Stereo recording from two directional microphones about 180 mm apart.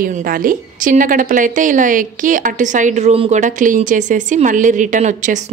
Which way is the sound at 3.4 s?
45° right (ahead or behind).